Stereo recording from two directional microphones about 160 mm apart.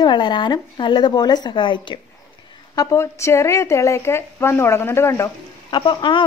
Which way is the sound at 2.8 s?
20° left (ahead or behind).